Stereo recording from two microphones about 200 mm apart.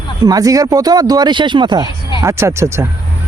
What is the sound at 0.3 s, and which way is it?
Speech, 20° right (ahead or behind).